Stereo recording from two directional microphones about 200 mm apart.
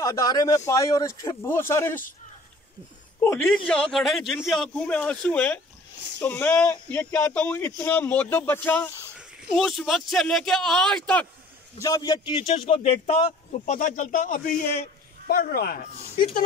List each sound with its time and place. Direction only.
0.0 s speech: 15° left (ahead or behind)
3.3 s a man's voice: 5° left (ahead or behind)
11.8 s a man's voice: 20° left (ahead or behind); by 16.3 s 45° left (ahead or behind)